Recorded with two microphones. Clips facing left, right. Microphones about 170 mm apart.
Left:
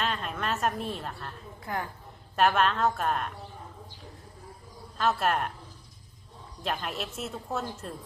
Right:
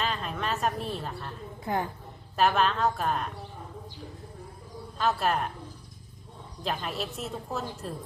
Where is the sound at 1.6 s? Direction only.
20° right (ahead or behind).